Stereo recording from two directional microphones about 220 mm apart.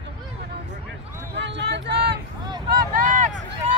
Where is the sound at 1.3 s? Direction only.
50° right (ahead or behind).